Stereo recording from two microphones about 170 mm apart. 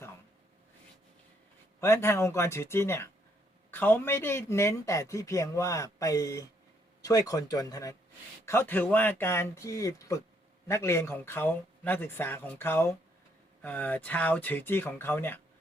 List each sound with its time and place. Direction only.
1.8 s a man's voice: 15° left (ahead or behind)